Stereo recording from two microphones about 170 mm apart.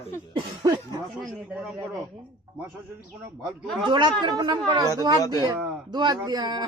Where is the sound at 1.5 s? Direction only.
10° right (ahead or behind).